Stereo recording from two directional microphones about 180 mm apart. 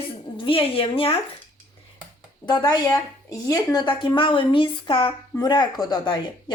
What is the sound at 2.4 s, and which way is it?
Speech, 25° left (ahead or behind).